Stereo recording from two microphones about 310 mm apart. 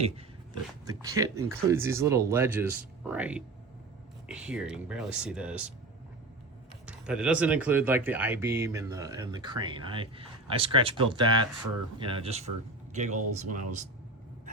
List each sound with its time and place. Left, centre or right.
0.9 s speech: centre
6.8 s speech: centre; by 13.8 s right